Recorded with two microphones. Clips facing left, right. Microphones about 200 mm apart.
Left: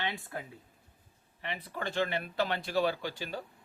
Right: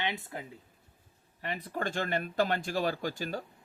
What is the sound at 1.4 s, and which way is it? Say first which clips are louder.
Speech: right 3 dB; 45° right (ahead or behind).